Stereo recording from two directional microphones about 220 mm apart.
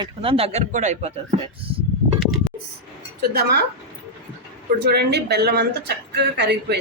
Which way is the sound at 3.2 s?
45° right (ahead or behind).